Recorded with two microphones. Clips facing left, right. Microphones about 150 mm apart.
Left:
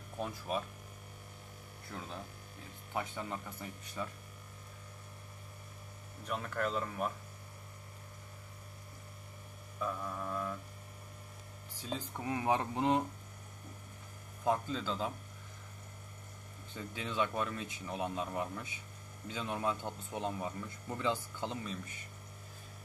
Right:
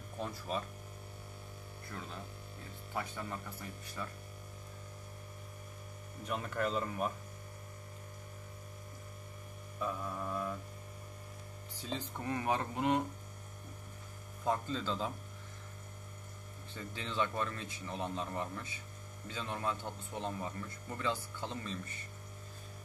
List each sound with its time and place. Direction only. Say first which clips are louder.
0.2 s speech: left 1 dB; 10° left (ahead or behind)
1.9 s speech: left 2 dB; 15° left (ahead or behind)
6.2 s speech: even; 5° right (ahead or behind)
9.8 s music: even; 5° right (ahead or behind)
11.8 s speech: even; 10° left (ahead or behind)
14.4 s speech: left 1 dB; 10° left (ahead or behind)
16.7 s speech: left 1 dB; 10° left (ahead or behind)